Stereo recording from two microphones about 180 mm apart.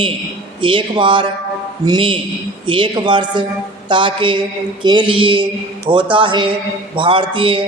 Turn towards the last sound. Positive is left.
turn(degrees=-30)  # may be behind; listen again after turning